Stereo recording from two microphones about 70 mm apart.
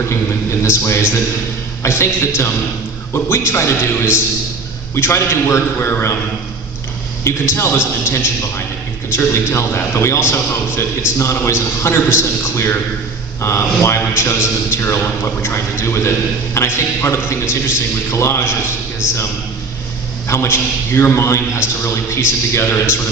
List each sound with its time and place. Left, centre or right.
0.6 s a man's voice: left
7.3 s a man's voice: left
20.2 s a man's voice: left